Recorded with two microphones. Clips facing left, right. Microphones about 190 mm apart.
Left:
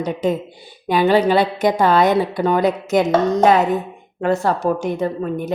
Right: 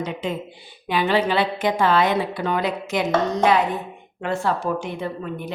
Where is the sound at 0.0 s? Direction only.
40° left (ahead or behind).